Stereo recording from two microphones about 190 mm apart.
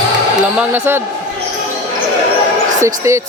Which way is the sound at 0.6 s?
10° right (ahead or behind).